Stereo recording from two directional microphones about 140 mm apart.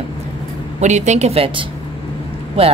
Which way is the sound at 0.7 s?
55° right (ahead or behind).